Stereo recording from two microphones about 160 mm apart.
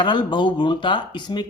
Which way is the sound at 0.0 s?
30° left (ahead or behind).